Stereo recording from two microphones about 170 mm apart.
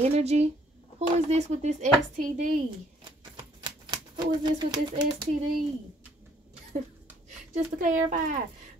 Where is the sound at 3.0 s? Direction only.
25° right (ahead or behind).